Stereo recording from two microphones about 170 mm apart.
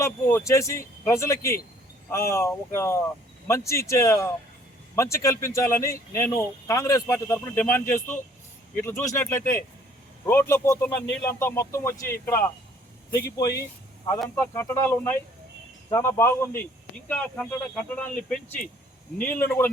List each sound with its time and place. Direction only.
0.0 s speech: 15° left (ahead or behind)
14.3 s speech: 15° left (ahead or behind)